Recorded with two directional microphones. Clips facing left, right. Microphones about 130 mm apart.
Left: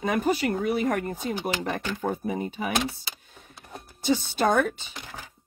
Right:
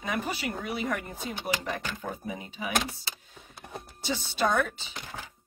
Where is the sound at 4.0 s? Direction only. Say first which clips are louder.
Left 5 dB; 50° left (ahead or behind).